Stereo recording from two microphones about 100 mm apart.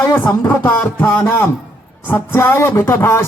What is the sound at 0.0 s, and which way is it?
Music, 40° left (ahead or behind).